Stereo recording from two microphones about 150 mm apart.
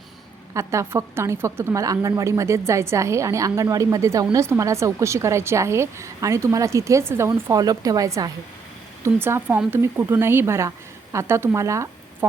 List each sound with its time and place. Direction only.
0.5 s speech: 20° right (ahead or behind)